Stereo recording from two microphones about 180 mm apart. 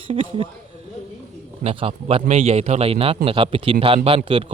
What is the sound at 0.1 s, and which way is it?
Speech, 30° right (ahead or behind).